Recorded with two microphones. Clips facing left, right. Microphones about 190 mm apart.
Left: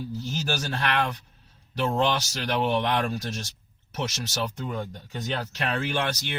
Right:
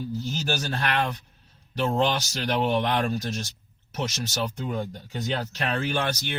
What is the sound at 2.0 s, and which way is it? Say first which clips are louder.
Speech: left 1 dB; 35° right (ahead or behind).